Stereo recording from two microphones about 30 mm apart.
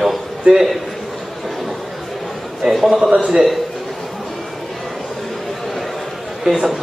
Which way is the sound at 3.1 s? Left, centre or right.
Right.